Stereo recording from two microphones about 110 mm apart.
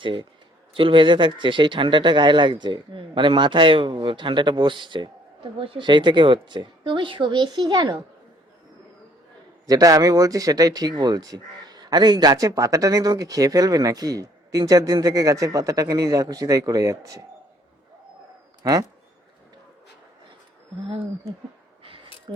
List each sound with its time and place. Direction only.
0.0 s speech: 50° right (ahead or behind)
9.6 s speech: 30° right (ahead or behind)
18.6 s speech: 30° right (ahead or behind)
21.8 s a sound: 55° right (ahead or behind)